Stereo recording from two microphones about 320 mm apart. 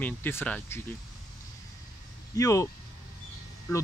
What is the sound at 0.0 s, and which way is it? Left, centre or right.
Speech, centre.